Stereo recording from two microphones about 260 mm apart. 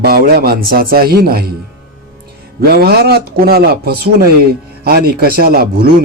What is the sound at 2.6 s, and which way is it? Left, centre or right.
Speech, right.